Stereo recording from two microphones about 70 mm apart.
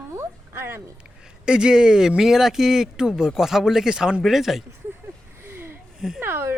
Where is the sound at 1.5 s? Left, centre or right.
Centre.